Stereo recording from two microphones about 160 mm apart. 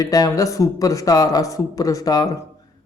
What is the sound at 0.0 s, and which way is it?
Speech, 20° left (ahead or behind).